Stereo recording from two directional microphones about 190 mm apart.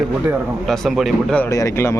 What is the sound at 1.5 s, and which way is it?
Speech, 15° left (ahead or behind).